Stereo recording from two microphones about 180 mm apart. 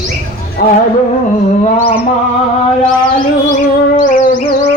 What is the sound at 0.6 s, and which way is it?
Music, 55° left (ahead or behind).